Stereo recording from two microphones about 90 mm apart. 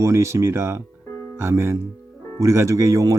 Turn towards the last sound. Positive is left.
turn(degrees=-35)  # may be behind; listen again after turning